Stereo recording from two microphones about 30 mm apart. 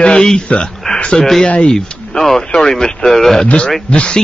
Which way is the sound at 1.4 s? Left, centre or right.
Left.